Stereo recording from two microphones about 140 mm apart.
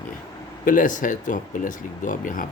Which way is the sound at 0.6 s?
70° left (ahead or behind).